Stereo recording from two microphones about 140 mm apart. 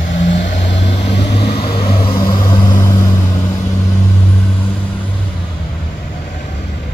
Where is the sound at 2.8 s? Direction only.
20° left (ahead or behind).